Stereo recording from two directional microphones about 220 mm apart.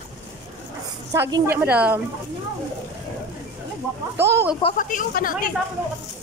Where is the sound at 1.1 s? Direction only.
10° right (ahead or behind).